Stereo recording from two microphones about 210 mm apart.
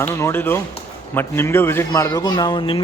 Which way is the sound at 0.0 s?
10° left (ahead or behind).